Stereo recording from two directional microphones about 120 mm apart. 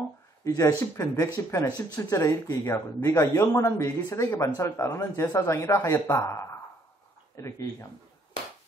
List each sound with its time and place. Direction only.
0.4 s a man's voice: 30° left (ahead or behind)